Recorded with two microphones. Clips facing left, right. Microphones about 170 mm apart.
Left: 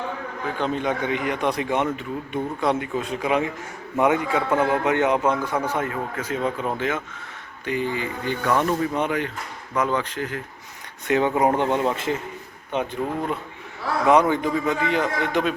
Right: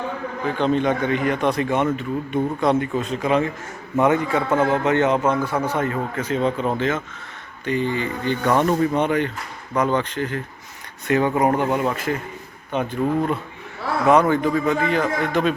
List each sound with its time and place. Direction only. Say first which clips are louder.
0.4 s a man's voice: right 5 dB; 10° left (ahead or behind)
8.4 s speech: right 3 dB; 20° right (ahead or behind)
9.0 s speech: right 4 dB; 5° left (ahead or behind)
11.3 s speech: right 1 dB; 25° left (ahead or behind)
11.7 s speech: right 1 dB; 5° right (ahead or behind)
12.7 s a man's voice: right 4 dB; 15° left (ahead or behind)